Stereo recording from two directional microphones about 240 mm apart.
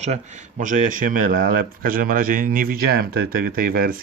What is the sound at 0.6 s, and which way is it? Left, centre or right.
A man's voice, right.